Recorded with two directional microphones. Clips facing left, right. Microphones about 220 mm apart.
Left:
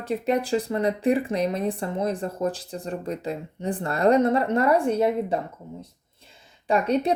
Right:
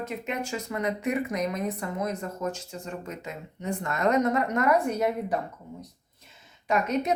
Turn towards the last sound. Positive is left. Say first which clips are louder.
# left 4 dB
turn(degrees=30)  # may be behind; listen again after turning